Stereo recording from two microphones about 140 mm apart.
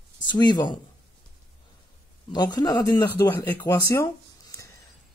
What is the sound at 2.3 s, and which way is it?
Speech, 30° left (ahead or behind).